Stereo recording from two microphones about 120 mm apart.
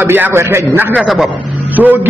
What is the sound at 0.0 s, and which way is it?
A man's voice, 20° right (ahead or behind).